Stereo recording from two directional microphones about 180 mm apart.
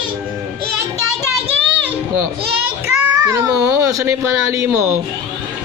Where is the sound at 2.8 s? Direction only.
15° right (ahead or behind).